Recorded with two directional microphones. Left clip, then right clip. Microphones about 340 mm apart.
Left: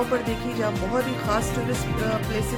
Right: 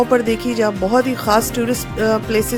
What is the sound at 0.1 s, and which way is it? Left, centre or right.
A woman's voice, right.